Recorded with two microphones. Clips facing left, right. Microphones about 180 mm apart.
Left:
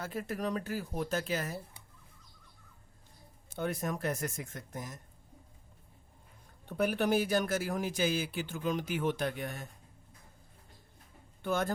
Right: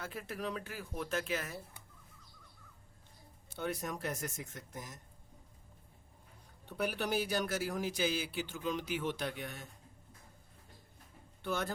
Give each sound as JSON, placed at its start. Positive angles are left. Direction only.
{"t": 0.0, "sound": "speech", "side_deg": 40}
{"t": 3.5, "sound": "speech", "side_deg": 50}
{"t": 6.7, "sound": "speech", "side_deg": 50}
{"t": 11.4, "sound": "speech", "side_deg": 50}